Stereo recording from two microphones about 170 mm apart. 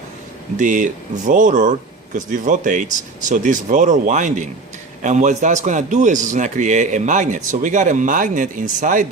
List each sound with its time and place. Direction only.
0.6 s a man's voice: 50° right (ahead or behind)